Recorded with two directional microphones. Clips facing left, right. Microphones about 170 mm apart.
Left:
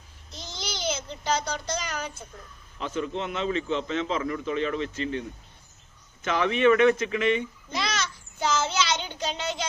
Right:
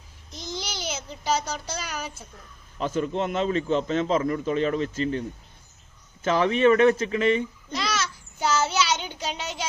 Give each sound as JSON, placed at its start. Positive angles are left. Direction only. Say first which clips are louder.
{"t": 0.3, "sound": "a child's voice", "louder": "right 3 dB", "side_deg": -10}
{"t": 2.7, "sound": "a man's voice", "louder": "right 4 dB", "side_deg": -40}
{"t": 6.2, "sound": "a man's voice", "louder": "right 2 dB", "side_deg": -35}
{"t": 7.8, "sound": "a child's voice", "louder": "right 1 dB", "side_deg": -5}